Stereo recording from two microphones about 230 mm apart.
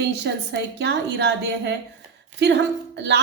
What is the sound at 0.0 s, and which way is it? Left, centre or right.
A woman's voice, right.